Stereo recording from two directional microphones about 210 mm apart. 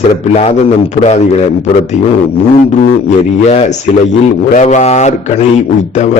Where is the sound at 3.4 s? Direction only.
35° left (ahead or behind).